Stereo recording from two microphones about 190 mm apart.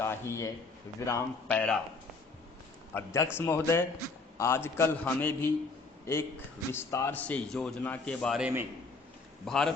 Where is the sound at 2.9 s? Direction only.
10° left (ahead or behind).